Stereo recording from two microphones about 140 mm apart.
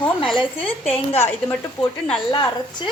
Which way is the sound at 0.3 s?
45° left (ahead or behind).